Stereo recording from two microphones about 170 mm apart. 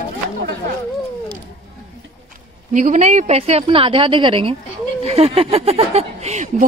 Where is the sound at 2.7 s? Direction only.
45° right (ahead or behind).